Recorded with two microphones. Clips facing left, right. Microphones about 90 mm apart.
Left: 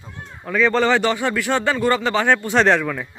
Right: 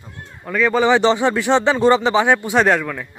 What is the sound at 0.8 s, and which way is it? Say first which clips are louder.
Speech: right 4 dB; 20° right (ahead or behind).